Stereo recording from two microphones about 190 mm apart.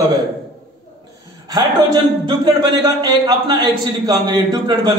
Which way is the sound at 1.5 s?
20° right (ahead or behind).